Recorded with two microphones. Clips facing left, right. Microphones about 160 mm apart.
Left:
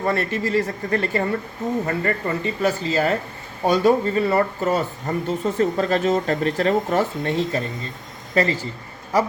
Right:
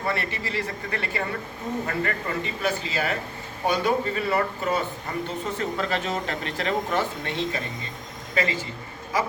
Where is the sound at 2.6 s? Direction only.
40° left (ahead or behind).